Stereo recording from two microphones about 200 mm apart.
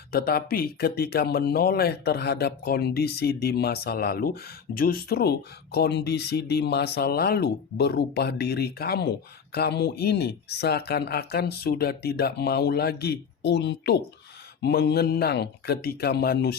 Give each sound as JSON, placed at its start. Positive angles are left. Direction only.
{"t": 0.1, "sound": "speech", "side_deg": 50}